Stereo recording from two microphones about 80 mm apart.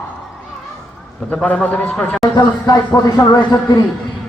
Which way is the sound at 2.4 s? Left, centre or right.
Left.